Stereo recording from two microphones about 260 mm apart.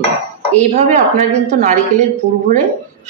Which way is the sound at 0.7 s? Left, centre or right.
Right.